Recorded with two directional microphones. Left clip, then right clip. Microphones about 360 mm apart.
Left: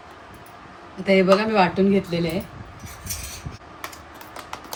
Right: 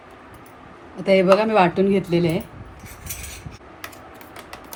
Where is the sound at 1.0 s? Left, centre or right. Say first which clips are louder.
Right 2 dB; centre.